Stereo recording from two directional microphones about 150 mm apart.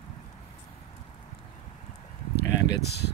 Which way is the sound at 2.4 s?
90° left.